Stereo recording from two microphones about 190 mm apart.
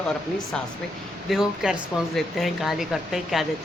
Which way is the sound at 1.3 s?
5° right (ahead or behind).